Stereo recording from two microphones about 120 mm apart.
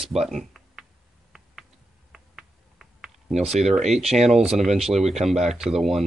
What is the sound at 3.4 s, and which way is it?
Speech, 65° right (ahead or behind).